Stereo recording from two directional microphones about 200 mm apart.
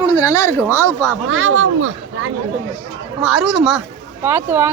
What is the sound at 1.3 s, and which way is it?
Speech, 80° right.